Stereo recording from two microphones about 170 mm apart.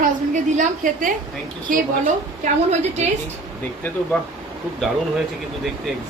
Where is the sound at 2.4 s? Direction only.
40° right (ahead or behind).